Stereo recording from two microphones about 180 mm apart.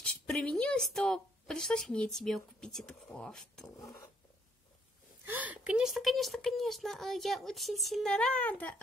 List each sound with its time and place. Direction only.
0.0 s speech: 5° left (ahead or behind)
3.8 s a sound: 20° left (ahead or behind)
5.2 s speech: 10° right (ahead or behind); by 8.8 s 10° left (ahead or behind)